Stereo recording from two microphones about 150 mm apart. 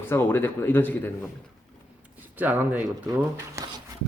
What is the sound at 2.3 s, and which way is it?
Speech, 10° right (ahead or behind).